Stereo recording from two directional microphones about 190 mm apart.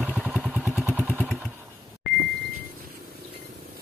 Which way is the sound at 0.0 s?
5° right (ahead or behind).